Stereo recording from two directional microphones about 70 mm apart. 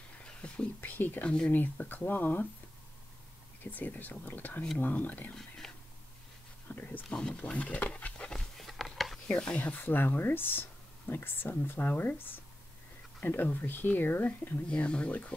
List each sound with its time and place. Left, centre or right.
0.2 s whispering: centre
0.7 s speech: left
3.7 s speech: left
6.7 s a sound: left; by 9.2 s centre
9.3 s speech: centre
9.6 s speech: left
11.9 s speech: left